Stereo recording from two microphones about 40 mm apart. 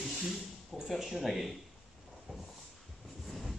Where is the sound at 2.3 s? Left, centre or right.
Right.